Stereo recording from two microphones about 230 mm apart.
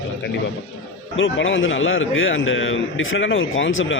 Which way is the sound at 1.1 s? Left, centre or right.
Left.